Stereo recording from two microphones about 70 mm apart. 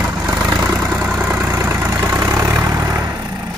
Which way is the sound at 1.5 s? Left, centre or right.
Right.